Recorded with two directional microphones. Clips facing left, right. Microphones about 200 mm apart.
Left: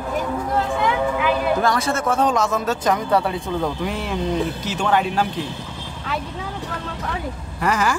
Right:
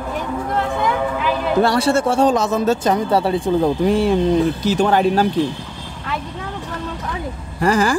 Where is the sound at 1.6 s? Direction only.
30° right (ahead or behind).